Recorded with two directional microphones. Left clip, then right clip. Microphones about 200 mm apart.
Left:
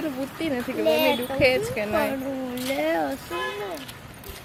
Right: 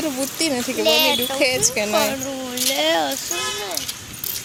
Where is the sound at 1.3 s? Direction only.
30° right (ahead or behind).